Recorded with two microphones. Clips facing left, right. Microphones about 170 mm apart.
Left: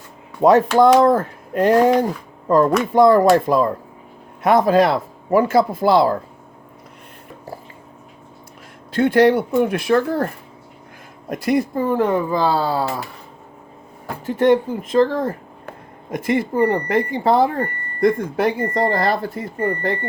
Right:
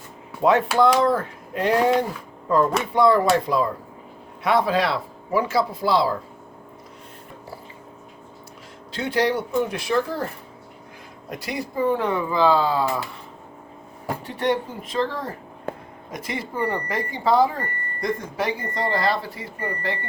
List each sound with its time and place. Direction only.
0.4 s speech: 40° left (ahead or behind)
8.9 s speech: 55° left (ahead or behind)
11.3 s speech: 50° left (ahead or behind)
14.3 s speech: 45° left (ahead or behind)